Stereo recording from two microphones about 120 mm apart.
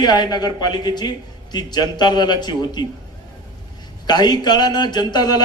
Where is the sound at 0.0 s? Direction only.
35° left (ahead or behind).